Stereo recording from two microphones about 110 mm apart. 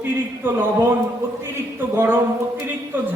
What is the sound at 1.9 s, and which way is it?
Speech, 20° right (ahead or behind).